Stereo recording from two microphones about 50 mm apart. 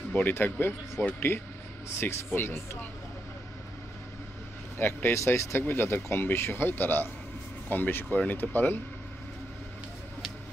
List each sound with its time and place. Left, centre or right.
0.3 s speech: left
4.7 s speech: left
5.7 s speech: left